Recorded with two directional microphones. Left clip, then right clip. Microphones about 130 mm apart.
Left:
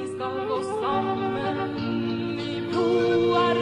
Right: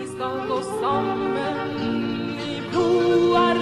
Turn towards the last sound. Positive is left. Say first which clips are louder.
# right 3 dB
turn(degrees=-35)  # may be behind; listen again after turning